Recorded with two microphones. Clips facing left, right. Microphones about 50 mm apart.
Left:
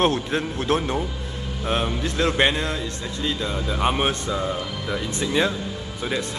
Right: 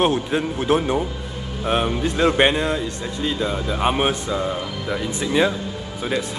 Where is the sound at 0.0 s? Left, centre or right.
Centre.